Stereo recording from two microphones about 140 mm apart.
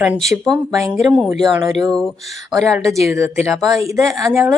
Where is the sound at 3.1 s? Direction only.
20° right (ahead or behind).